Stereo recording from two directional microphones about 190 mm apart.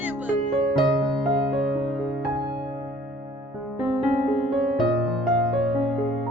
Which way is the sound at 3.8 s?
Centre (ahead or behind).